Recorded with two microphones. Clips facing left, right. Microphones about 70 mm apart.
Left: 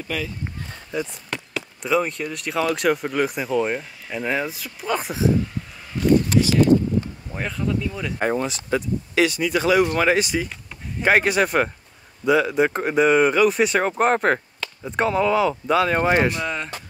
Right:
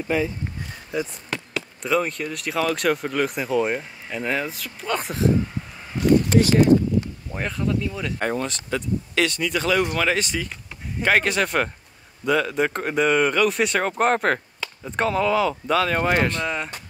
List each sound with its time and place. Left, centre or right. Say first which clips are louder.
0.1 s speech: right 6 dB; right
0.9 s speech: even; centre
6.3 s speech: right 2 dB; right
7.3 s speech: even; centre
8.2 s speech: left 4 dB; centre
16.4 s speech: even; centre